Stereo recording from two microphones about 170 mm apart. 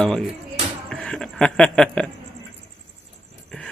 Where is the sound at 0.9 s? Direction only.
5° left (ahead or behind).